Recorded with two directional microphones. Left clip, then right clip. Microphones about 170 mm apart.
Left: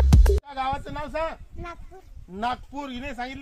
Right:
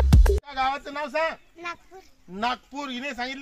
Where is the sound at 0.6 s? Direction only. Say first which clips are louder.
Right 2 dB; 20° right (ahead or behind).